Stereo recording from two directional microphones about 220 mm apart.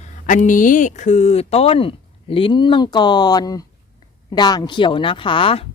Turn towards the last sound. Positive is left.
turn(degrees=25)  # may be behind; listen again after turning